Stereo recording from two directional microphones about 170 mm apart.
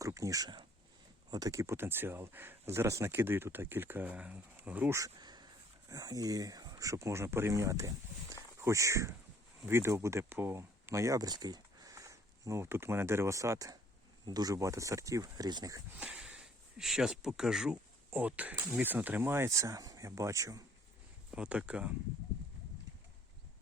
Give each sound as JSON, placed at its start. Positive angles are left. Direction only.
{"t": 0.0, "sound": "speech", "side_deg": -20}
{"t": 16.0, "sound": "speech", "side_deg": -5}
{"t": 21.2, "sound": "speech", "side_deg": -5}